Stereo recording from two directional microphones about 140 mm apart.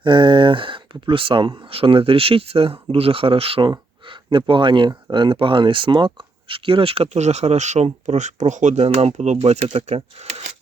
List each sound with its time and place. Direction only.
0.0 s speech: 35° right (ahead or behind)